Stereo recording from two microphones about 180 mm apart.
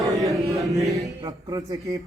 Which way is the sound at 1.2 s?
20° right (ahead or behind).